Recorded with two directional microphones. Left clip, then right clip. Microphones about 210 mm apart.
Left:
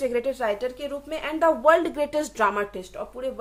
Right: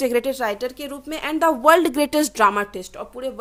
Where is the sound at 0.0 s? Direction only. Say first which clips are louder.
Right 4 dB; 50° right (ahead or behind).